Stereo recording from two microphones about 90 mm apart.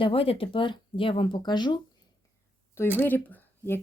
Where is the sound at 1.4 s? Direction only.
55° left (ahead or behind).